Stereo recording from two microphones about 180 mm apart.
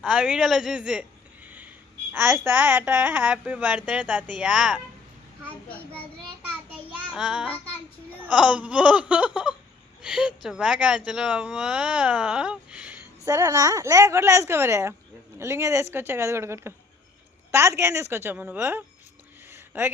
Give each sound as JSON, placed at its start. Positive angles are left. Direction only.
{"t": 0.0, "sound": "speech", "side_deg": -5}
{"t": 5.7, "sound": "a child's voice", "side_deg": 10}
{"t": 6.9, "sound": "child singing", "side_deg": -5}
{"t": 8.2, "sound": "speech", "side_deg": -5}
{"t": 13.2, "sound": "speech", "side_deg": -20}
{"t": 19.5, "sound": "a sound", "side_deg": -15}